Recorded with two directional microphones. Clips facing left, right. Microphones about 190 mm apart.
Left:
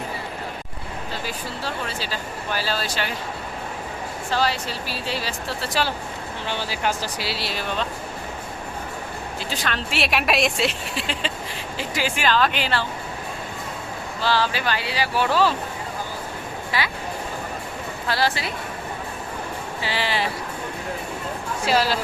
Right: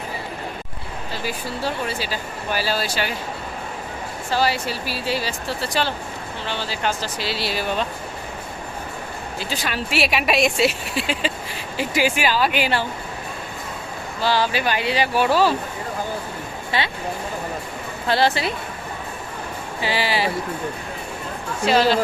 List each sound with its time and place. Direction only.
1.3 s speech: 10° right (ahead or behind)
4.3 s speech: 10° right (ahead or behind)
9.4 s speech: 5° right (ahead or behind)
14.2 s speech: 15° right (ahead or behind)
16.7 s speech: 25° right (ahead or behind)
18.1 s speech: 25° right (ahead or behind)
19.8 s speech: 10° right (ahead or behind)
21.7 s speech: 5° left (ahead or behind)